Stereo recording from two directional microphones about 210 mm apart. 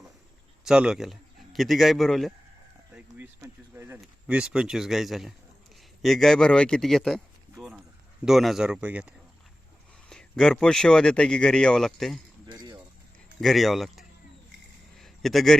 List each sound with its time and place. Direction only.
0.6 s a man's voice: 5° right (ahead or behind)
2.9 s a man's voice: 10° right (ahead or behind)
8.2 s a man's voice: centre (ahead or behind)
12.5 s music: 20° right (ahead or behind)
13.4 s a man's voice: centre (ahead or behind)
14.9 s a sound: centre (ahead or behind)